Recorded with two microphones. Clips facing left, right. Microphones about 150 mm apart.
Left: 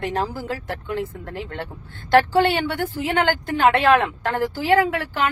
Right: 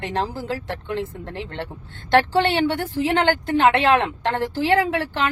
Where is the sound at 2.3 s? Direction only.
30° right (ahead or behind).